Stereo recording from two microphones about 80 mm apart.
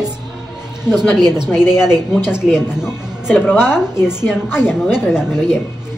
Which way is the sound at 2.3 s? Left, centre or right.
Centre.